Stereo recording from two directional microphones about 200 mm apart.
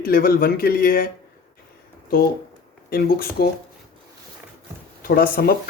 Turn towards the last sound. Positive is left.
turn(degrees=50)  # may be behind; listen again after turning